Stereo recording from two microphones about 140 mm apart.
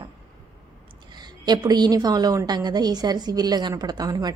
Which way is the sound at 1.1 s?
30° right (ahead or behind).